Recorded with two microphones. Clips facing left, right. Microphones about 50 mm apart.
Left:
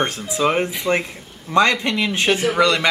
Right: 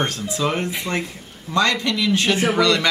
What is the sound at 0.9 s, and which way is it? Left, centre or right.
Speech, centre.